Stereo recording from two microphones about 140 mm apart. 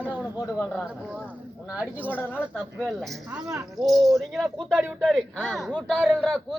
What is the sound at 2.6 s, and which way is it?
A man's voice, 5° left (ahead or behind).